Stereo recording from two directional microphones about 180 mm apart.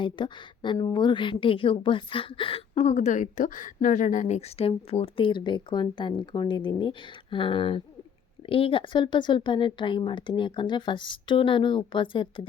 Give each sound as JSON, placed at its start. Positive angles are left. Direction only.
{"t": 0.0, "sound": "a woman's voice", "side_deg": 25}